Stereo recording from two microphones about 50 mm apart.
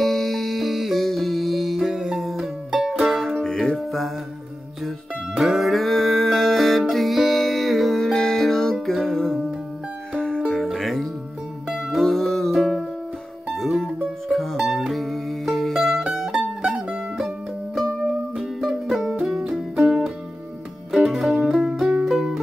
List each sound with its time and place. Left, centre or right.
0.0 s music: centre
3.4 s music: centre
4.8 s music: centre
8.1 s music: centre
10.1 s music: centre
10.4 s music: centre
16.3 s mandolin: centre
18.4 s music: centre
20.9 s music: centre